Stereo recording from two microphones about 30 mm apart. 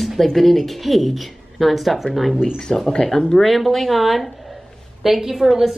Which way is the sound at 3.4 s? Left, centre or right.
Centre.